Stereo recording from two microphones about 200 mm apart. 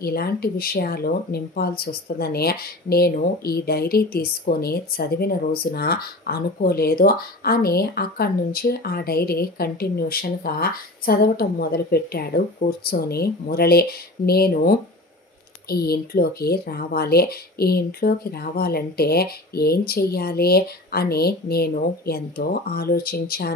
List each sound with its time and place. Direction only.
0.0 s speech: 50° left (ahead or behind)